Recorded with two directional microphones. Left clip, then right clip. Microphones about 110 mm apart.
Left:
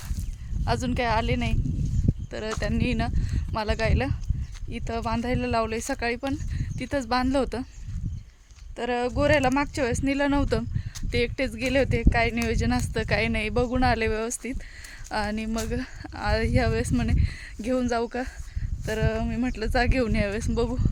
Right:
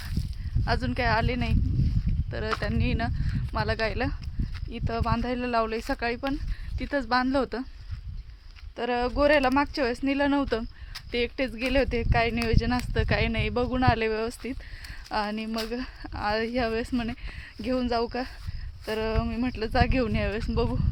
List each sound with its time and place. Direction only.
0.6 s speech: 30° left (ahead or behind)
8.7 s speech: 10° left (ahead or behind)